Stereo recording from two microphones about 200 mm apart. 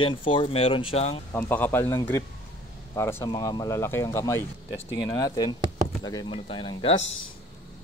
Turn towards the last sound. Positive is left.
turn(degrees=30)  # may be behind; listen again after turning